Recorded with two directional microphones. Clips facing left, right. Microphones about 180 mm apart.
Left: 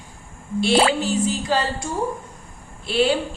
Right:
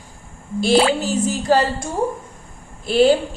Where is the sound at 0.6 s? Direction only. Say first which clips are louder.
Right 2 dB; 45° right (ahead or behind).